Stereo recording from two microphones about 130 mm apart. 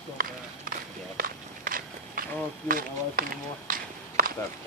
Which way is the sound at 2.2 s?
90° right.